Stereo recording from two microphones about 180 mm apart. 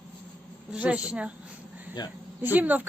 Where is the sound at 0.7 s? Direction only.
5° right (ahead or behind).